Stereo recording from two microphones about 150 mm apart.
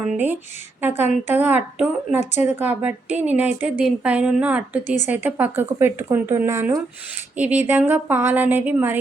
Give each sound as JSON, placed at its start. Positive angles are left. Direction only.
{"t": 0.0, "sound": "a woman's voice", "side_deg": -10}